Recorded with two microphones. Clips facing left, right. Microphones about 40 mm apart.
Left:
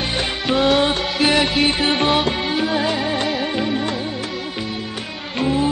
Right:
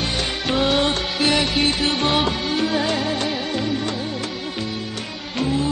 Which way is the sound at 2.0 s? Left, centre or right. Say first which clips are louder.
Left 2 dB; centre.